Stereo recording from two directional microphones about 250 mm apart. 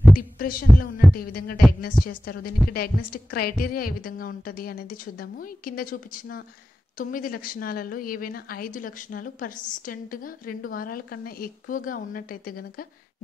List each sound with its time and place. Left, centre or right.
0.1 s heart sounds: left
1.1 s a woman's voice: left